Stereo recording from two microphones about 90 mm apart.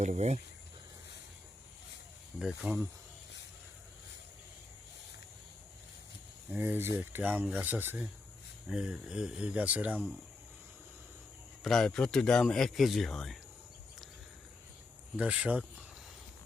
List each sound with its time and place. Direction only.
2.4 s speech: 10° right (ahead or behind)
6.5 s speech: 20° right (ahead or behind)
8.6 s speech: 10° right (ahead or behind)
11.6 s speech: 5° left (ahead or behind)
15.1 s speech: 15° right (ahead or behind)